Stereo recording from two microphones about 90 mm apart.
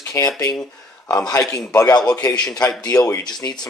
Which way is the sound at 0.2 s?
35° left (ahead or behind).